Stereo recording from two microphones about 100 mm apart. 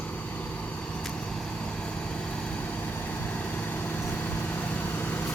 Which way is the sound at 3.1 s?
15° left (ahead or behind).